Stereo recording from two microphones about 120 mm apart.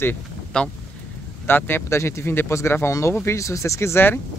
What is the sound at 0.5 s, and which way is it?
Speech, 10° left (ahead or behind).